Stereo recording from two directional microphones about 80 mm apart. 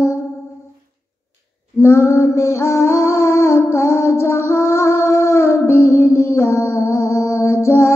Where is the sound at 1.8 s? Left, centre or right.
Left.